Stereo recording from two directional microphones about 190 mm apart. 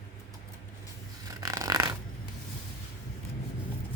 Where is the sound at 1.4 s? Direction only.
20° right (ahead or behind).